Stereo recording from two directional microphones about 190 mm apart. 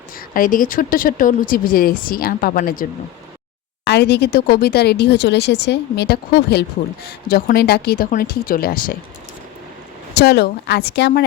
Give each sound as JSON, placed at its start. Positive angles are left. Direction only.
{"t": 0.2, "sound": "speech", "side_deg": 45}
{"t": 3.8, "sound": "speech", "side_deg": 65}
{"t": 10.2, "sound": "speech", "side_deg": 60}